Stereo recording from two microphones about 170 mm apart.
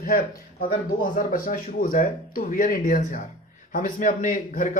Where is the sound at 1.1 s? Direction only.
55° left (ahead or behind).